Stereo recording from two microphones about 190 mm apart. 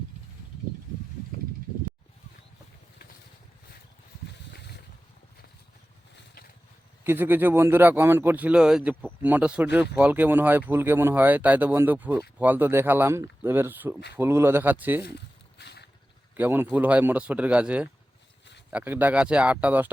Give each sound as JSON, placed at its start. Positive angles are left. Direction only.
{"t": 4.5, "sound": "a sound", "side_deg": 60}
{"t": 7.0, "sound": "speech", "side_deg": -10}
{"t": 15.5, "sound": "vehicle", "side_deg": 60}
{"t": 16.4, "sound": "speech", "side_deg": -10}